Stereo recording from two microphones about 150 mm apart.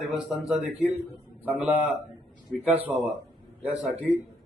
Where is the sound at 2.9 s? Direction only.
5° right (ahead or behind).